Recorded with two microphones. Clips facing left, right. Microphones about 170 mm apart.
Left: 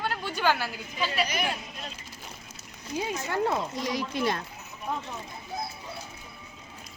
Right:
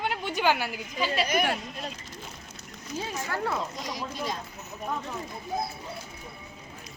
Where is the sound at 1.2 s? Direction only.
50° right (ahead or behind).